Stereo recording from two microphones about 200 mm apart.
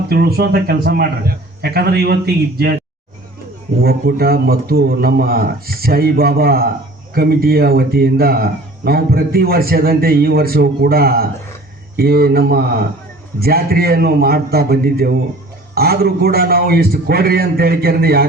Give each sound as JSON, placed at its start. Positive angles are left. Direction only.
{"t": 0.1, "sound": "speech", "side_deg": -50}
{"t": 3.8, "sound": "speech", "side_deg": -50}